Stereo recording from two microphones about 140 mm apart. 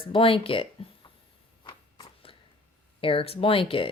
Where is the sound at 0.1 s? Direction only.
40° left (ahead or behind).